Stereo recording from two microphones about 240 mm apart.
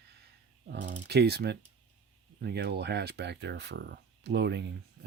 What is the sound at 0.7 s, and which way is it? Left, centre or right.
Speech, right.